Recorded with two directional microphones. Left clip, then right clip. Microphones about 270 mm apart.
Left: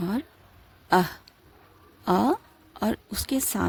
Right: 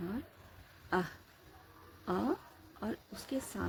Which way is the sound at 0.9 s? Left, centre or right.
Left.